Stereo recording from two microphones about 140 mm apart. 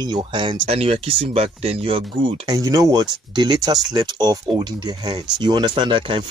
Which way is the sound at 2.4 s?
25° right (ahead or behind).